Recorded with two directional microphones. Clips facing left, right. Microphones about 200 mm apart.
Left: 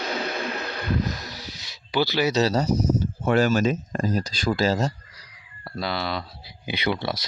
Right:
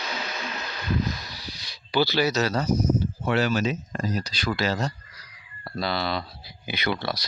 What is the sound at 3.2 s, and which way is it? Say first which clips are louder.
Speech: left 4 dB; 45° left (ahead or behind).